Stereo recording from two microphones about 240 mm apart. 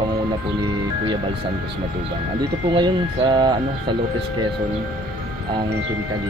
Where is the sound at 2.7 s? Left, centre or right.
Centre.